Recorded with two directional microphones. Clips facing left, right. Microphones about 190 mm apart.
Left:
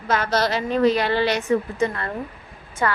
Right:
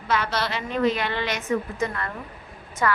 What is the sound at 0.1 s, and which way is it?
A woman's voice, 45° left (ahead or behind).